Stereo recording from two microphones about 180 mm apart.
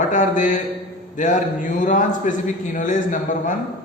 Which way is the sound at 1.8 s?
45° left (ahead or behind).